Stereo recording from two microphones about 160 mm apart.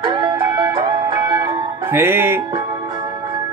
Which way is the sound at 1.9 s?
15° right (ahead or behind).